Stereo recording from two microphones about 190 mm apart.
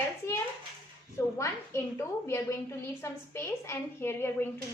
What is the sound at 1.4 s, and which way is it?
A woman's voice, 15° left (ahead or behind).